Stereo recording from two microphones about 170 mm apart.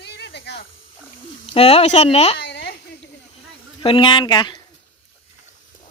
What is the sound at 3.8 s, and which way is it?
Speech, 30° left (ahead or behind).